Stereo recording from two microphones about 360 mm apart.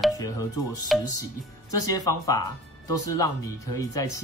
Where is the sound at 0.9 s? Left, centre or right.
Centre.